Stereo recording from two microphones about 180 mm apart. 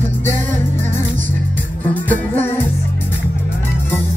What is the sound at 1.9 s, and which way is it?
Music, 10° left (ahead or behind).